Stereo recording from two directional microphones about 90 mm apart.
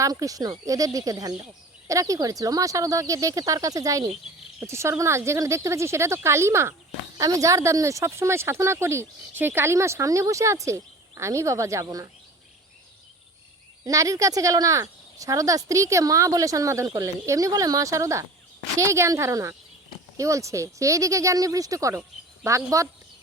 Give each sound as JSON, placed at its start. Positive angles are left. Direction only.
{"t": 0.0, "sound": "speech", "side_deg": -40}
{"t": 13.8, "sound": "speech", "side_deg": -40}